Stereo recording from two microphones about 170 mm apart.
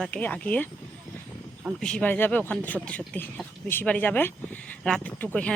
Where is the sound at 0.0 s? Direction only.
10° left (ahead or behind).